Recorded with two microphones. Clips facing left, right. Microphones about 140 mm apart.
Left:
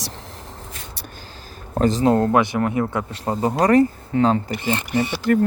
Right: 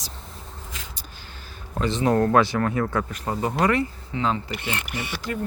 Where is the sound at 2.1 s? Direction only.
25° left (ahead or behind).